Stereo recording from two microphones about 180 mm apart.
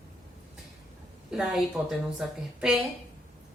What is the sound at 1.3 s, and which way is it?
A woman's voice, 5° right (ahead or behind).